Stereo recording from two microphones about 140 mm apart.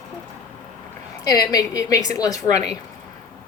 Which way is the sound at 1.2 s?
25° left (ahead or behind).